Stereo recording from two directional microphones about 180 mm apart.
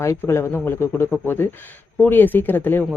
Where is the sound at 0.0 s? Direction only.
15° left (ahead or behind).